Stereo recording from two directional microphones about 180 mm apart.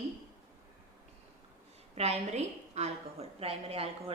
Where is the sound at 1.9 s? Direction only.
35° right (ahead or behind).